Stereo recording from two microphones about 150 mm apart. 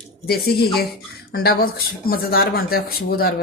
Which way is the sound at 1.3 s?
85° left.